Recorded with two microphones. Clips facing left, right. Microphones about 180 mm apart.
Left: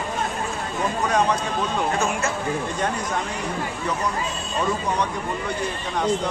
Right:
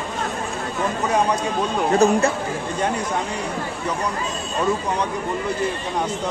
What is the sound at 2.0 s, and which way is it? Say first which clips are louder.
Speech: right 8 dB; 35° right (ahead or behind).